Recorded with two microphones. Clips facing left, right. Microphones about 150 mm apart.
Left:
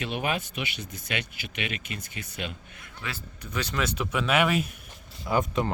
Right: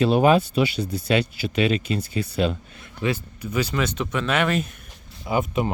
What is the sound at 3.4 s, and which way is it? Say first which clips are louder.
Speech: right 5 dB; 5° right (ahead or behind).